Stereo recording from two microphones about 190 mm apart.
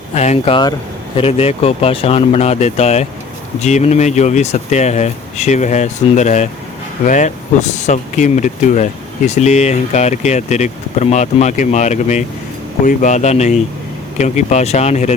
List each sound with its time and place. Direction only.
0.1 s speech: 35° left (ahead or behind)